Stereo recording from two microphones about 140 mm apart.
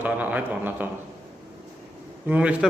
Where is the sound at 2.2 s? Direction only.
10° right (ahead or behind).